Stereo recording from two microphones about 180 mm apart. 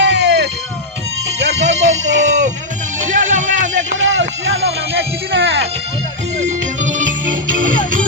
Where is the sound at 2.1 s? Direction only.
40° right (ahead or behind).